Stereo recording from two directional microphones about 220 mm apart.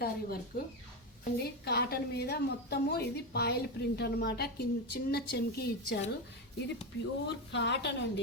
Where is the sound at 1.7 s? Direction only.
50° left (ahead or behind).